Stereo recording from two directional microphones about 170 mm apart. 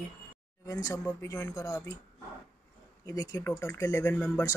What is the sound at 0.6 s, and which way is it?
Speech, 20° left (ahead or behind).